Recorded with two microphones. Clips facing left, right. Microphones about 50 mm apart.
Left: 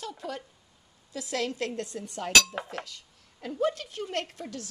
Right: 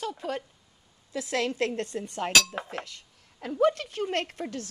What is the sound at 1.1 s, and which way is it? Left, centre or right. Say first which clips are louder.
A woman's voice: right 3 dB; right.